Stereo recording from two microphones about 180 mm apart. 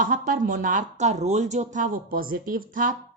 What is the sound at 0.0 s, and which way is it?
A woman's voice, 50° right (ahead or behind).